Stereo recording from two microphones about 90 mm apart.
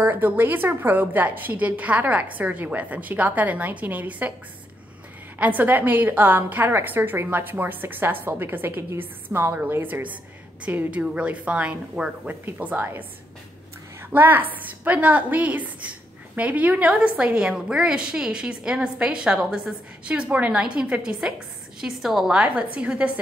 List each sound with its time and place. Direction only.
0.0 s a woman's voice: 20° right (ahead or behind)
5.4 s a woman's voice: 20° right (ahead or behind)
14.1 s a woman's voice: 20° right (ahead or behind); by 22.4 s 5° right (ahead or behind)
22.4 s a woman's voice: 15° right (ahead or behind)